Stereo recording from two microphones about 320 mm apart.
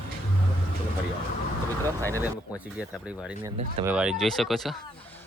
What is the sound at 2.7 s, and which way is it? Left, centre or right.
Speech, centre.